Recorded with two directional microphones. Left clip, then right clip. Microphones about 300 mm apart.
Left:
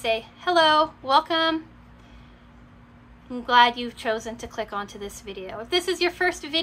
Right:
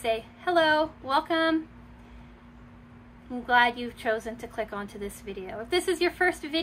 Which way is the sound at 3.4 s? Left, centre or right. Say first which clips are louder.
Left 5 dB; centre.